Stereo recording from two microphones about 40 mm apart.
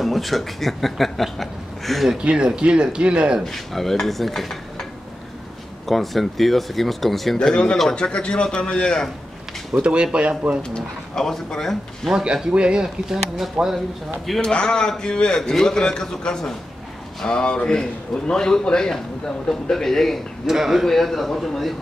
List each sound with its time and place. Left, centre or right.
0.0 s a man's voice: centre
2.2 s speech: right
3.4 s a man's voice: centre
4.0 s stir: centre
5.9 s a man's voice: centre
7.4 s a man's voice: left
9.8 s speech: right
10.7 s a man's voice: centre
12.1 s speech: centre
12.8 s speech: centre
14.4 s a man's voice: left
20.4 s speech: centre
20.8 s a man's voice: centre